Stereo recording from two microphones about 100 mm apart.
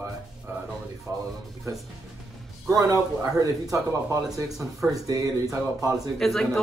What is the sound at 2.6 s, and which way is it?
Speech, 30° right (ahead or behind).